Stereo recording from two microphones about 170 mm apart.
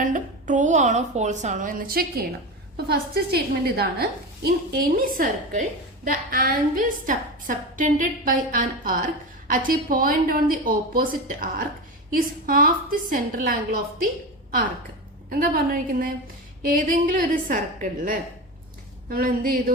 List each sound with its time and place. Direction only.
0.0 s a woman's voice: 50° right (ahead or behind)
15.3 s a woman's voice: 60° right (ahead or behind)